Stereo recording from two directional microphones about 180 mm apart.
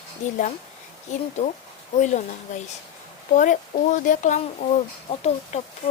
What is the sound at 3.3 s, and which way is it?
Speech, 45° left (ahead or behind).